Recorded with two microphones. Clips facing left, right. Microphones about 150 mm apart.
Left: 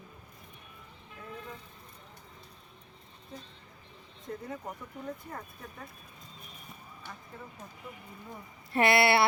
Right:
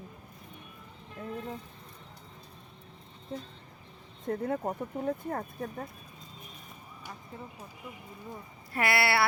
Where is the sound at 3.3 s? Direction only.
45° right (ahead or behind).